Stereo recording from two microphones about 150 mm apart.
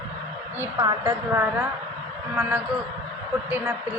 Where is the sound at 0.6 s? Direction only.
20° right (ahead or behind).